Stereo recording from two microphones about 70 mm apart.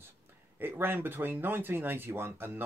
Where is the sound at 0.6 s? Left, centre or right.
Right.